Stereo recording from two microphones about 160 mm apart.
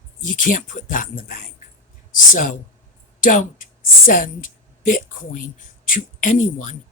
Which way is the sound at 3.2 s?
55° left (ahead or behind).